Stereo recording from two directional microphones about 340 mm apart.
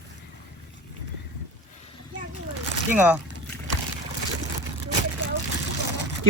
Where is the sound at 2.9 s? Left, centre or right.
Centre.